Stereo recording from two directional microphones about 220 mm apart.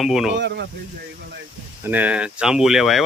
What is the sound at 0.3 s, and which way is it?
Speech, 50° right (ahead or behind).